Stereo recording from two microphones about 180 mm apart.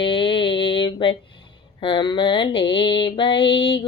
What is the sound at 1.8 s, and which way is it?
Mantra, 25° left (ahead or behind).